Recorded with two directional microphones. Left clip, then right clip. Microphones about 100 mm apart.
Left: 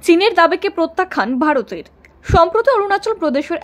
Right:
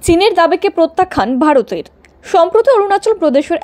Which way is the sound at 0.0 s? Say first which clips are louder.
Right 2 dB; 15° right (ahead or behind).